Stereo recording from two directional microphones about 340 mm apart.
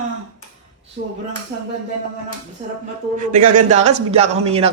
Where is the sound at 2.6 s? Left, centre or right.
Centre.